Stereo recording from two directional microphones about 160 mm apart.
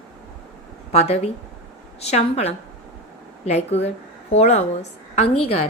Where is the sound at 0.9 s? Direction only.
40° left (ahead or behind).